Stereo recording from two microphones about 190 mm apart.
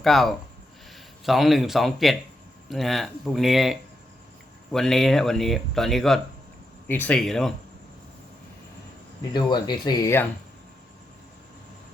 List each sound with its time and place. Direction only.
0.0 s speech: centre (ahead or behind)
9.3 s speech: 20° left (ahead or behind)